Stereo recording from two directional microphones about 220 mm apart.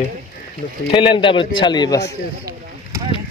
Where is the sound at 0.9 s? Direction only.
20° left (ahead or behind).